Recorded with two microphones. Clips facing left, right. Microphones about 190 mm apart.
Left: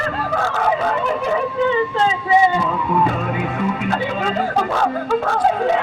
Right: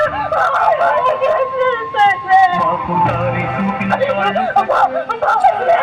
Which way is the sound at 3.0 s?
70° right (ahead or behind).